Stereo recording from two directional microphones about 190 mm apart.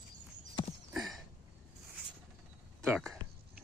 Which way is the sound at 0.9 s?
Centre (ahead or behind).